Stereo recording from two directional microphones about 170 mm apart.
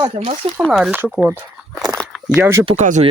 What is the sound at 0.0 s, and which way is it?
Speech, 35° right (ahead or behind).